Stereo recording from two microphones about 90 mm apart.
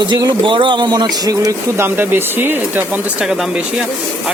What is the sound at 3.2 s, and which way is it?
Speech, 5° right (ahead or behind).